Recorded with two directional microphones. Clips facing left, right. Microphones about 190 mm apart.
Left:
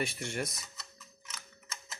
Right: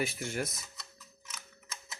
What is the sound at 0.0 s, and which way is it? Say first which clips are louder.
Mechanisms: right 1 dB; centre (ahead or behind).